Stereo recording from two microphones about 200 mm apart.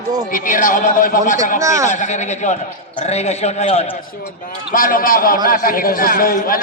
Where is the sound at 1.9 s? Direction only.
35° left (ahead or behind).